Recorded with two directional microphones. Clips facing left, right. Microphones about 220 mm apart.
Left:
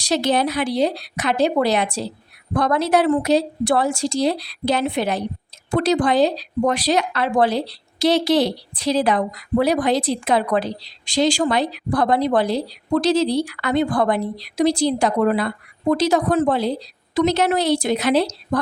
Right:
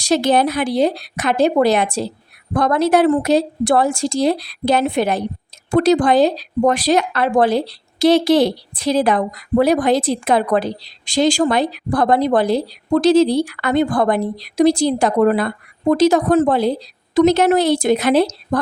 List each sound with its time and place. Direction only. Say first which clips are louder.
0.0 s speech: right 4 dB; 50° right (ahead or behind)